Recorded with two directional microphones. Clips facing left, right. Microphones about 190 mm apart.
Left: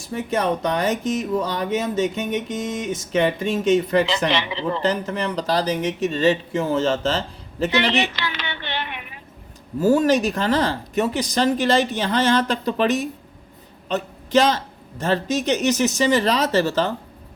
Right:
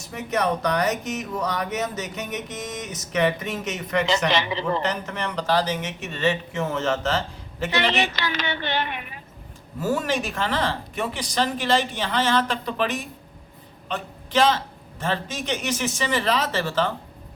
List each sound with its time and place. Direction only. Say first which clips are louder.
0.0 s speech: left 2 dB; 30° left (ahead or behind)
4.3 s speech: even; 40° right (ahead or behind)
4.8 s speech: left 5 dB; 30° left (ahead or behind)
8.0 s speech: right 1 dB; 40° right (ahead or behind)
9.8 s speech: left 8 dB; 40° left (ahead or behind)